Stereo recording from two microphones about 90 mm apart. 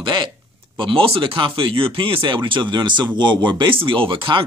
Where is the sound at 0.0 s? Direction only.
60° right (ahead or behind).